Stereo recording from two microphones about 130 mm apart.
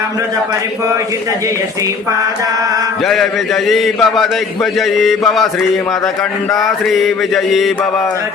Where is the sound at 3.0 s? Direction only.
Centre (ahead or behind).